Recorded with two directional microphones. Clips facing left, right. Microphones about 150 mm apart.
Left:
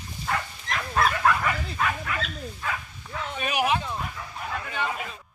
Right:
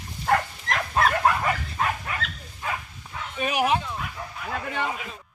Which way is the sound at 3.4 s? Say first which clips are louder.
Right 2 dB; 35° right (ahead or behind).